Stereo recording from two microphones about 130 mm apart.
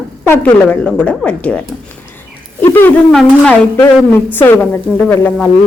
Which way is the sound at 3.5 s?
15° left (ahead or behind).